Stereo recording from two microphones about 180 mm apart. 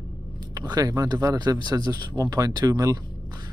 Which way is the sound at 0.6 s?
20° right (ahead or behind).